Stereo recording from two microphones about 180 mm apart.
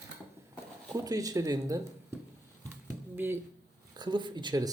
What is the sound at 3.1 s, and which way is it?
Speech, 10° right (ahead or behind).